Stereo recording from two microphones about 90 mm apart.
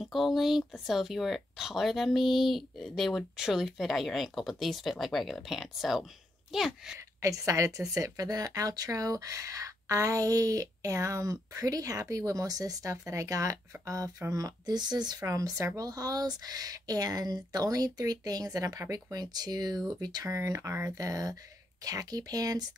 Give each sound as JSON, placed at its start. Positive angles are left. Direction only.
{"t": 0.0, "sound": "speech", "side_deg": 0}
{"t": 7.2, "sound": "speech", "side_deg": -35}
{"t": 20.2, "sound": "speech", "side_deg": -35}